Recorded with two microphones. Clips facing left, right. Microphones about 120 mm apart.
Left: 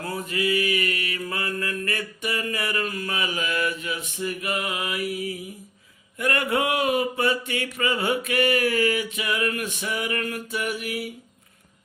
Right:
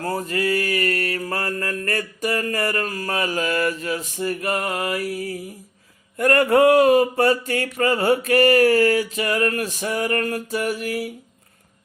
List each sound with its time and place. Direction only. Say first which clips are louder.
0.0 s mantra: right 4 dB; 40° right (ahead or behind)